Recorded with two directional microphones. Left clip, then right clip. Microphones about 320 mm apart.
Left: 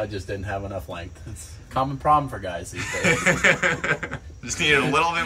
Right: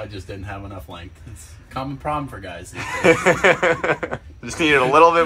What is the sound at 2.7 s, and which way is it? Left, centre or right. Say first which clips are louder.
Speech: right 6 dB; centre.